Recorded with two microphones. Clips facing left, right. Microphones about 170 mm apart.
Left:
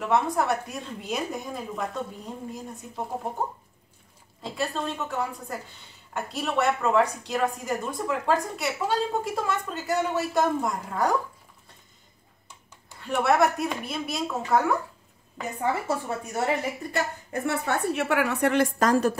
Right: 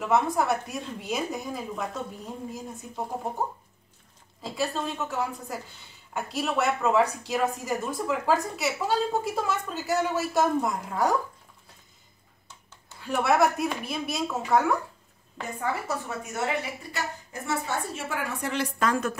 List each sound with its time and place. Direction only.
0.0 s a woman's voice: centre (ahead or behind)
13.0 s a woman's voice: centre (ahead or behind)
15.6 s a woman's voice: 30° left (ahead or behind)
16.9 s a woman's voice: 60° left (ahead or behind)
18.8 s a woman's voice: 35° left (ahead or behind)